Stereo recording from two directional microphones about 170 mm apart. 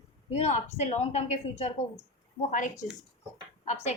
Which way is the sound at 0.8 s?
40° left (ahead or behind).